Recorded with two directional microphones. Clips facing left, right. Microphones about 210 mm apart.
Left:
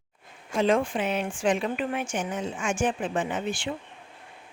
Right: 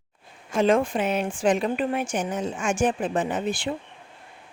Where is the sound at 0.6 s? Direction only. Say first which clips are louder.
Right 3 dB; 45° right (ahead or behind).